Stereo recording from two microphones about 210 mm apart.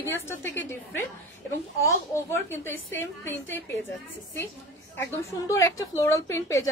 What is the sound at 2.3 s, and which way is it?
A woman's voice, 10° left (ahead or behind).